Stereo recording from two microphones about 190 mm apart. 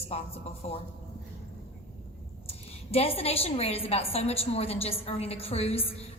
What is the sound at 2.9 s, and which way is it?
A woman's voice, 30° left (ahead or behind).